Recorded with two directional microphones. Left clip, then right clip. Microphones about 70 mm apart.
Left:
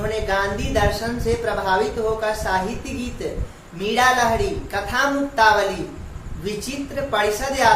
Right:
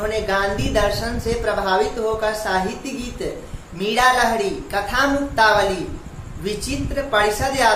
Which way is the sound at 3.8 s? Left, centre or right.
Right.